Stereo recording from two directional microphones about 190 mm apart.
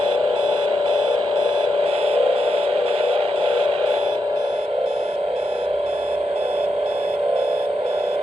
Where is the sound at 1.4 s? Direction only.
30° right (ahead or behind).